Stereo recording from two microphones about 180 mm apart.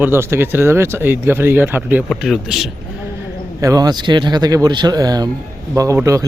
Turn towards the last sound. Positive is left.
turn(degrees=-15)  # may be behind; listen again after turning